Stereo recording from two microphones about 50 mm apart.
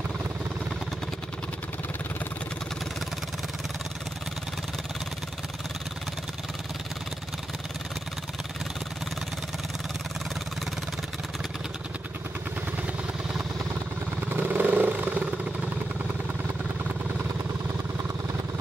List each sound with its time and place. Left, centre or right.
14.3 s vehicle: right